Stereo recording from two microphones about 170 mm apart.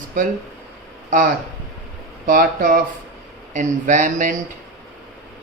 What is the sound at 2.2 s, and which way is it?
Speech, 55° right (ahead or behind).